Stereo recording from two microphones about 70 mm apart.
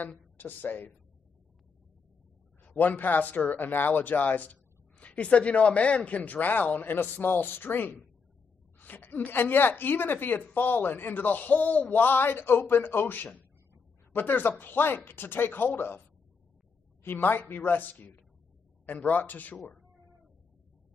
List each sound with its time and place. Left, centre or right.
0.0 s speech: left
2.6 s speech: left
17.0 s speech: left
19.8 s cat: centre